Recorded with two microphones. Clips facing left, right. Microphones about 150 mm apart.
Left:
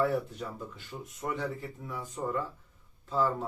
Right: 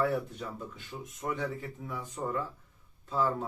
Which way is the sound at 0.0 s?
Centre (ahead or behind).